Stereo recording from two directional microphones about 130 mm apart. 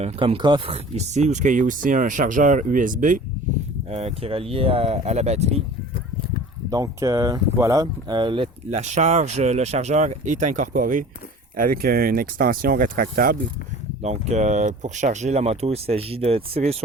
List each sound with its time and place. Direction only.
0.2 s speech: 40° right (ahead or behind); by 3.2 s 90° right
3.8 s speech: 55° right (ahead or behind)
6.7 s speech: 25° right (ahead or behind)
8.7 s speech: 60° right (ahead or behind); by 11.0 s 90° right
12.1 s speech: 90° right
14.0 s speech: 60° right (ahead or behind)